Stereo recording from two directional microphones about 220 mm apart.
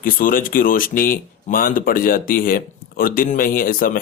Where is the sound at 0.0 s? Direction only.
40° left (ahead or behind).